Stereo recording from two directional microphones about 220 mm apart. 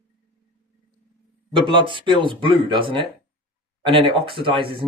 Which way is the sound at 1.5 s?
20° right (ahead or behind).